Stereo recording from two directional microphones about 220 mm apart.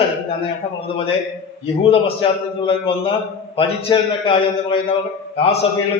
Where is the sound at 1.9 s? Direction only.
25° left (ahead or behind).